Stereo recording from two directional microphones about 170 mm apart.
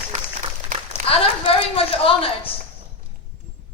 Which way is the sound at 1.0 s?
55° right (ahead or behind).